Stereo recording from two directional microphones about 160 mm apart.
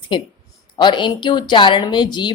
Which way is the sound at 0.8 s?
30° left (ahead or behind).